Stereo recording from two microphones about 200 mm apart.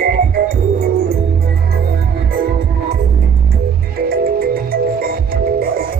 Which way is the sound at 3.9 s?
50° right (ahead or behind).